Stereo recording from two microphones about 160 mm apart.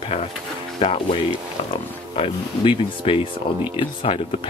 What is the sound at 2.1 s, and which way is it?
Speech, 35° left (ahead or behind).